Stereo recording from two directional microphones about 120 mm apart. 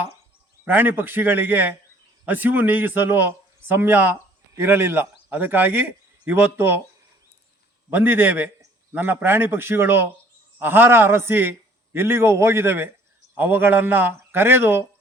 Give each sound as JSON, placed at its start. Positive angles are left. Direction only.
{"t": 0.6, "sound": "a man's voice", "side_deg": -15}
{"t": 7.9, "sound": "a man's voice", "side_deg": -15}